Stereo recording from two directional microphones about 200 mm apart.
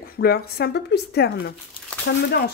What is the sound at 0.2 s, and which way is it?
Speech, 55° left (ahead or behind).